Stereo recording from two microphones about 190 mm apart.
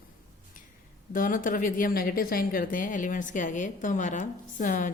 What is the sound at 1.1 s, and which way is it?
A woman's voice, 45° left (ahead or behind).